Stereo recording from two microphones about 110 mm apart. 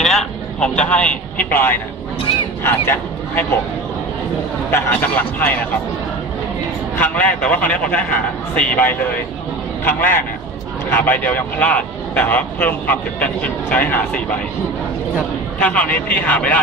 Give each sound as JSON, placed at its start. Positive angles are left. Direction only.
{"t": 0.0, "sound": "speech", "side_deg": 5}
{"t": 4.6, "sound": "speech", "side_deg": 20}
{"t": 7.0, "sound": "a man's voice", "side_deg": 15}
{"t": 15.6, "sound": "speech", "side_deg": 10}